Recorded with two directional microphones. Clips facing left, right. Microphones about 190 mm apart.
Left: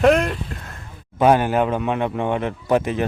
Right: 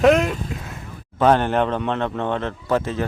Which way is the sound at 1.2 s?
10° left (ahead or behind).